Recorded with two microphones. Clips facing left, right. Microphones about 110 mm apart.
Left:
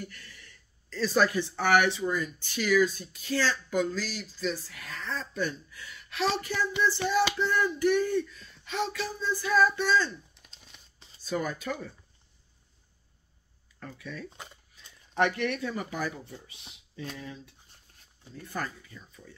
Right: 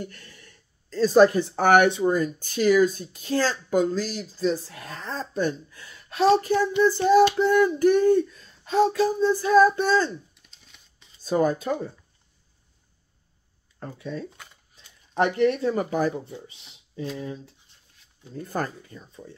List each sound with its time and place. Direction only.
0.0 s speech: 30° right (ahead or behind)
0.3 s a woman's voice: 45° right (ahead or behind)
6.8 s child singing: 40° right (ahead or behind)
8.3 s speech: 35° right (ahead or behind)
9.3 s child singing: 40° right (ahead or behind)
11.2 s speech: 35° right (ahead or behind)
13.7 s speech: 30° right (ahead or behind)
14.8 s a sound: 30° right (ahead or behind)
15.1 s speech: 30° right (ahead or behind)
15.7 s speech: 40° right (ahead or behind)
16.7 s a sound: 30° right (ahead or behind)
17.2 s speech: 30° right (ahead or behind)
18.3 s speech: 40° right (ahead or behind)